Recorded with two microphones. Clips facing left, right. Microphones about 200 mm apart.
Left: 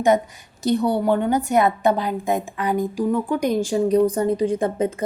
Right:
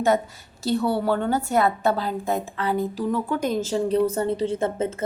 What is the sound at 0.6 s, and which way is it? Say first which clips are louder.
A woman's voice: left 3 dB; 20° left (ahead or behind).